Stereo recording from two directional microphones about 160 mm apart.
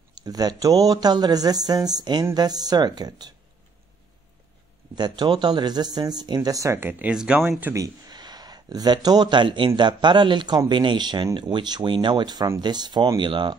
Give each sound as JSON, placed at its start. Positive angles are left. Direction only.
{"t": 0.1, "sound": "speech", "side_deg": -25}
{"t": 4.9, "sound": "speech", "side_deg": -25}